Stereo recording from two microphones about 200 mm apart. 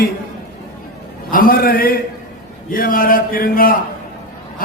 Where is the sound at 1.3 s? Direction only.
45° left (ahead or behind).